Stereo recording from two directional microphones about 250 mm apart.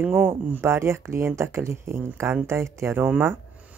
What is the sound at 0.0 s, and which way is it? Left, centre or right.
Speech, centre.